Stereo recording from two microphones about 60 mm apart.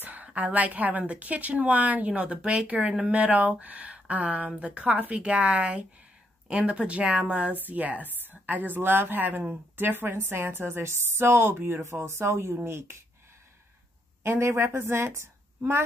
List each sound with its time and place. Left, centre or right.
0.0 s a woman's voice: right
14.2 s a woman's voice: right